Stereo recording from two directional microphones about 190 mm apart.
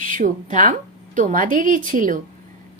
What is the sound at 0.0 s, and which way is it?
A woman's voice, 45° right (ahead or behind).